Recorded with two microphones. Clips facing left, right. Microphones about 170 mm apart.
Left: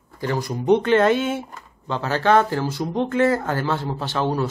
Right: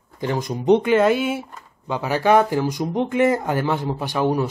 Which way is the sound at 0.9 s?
5° right (ahead or behind).